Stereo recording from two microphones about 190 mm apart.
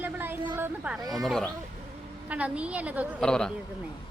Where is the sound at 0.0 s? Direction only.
10° right (ahead or behind).